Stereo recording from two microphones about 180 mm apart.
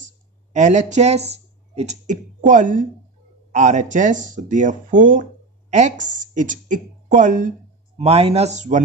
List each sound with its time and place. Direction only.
0.0 s speech: 40° right (ahead or behind)
8.0 s speech: 35° right (ahead or behind)